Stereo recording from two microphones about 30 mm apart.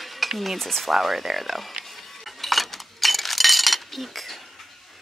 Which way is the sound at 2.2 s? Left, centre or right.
Centre.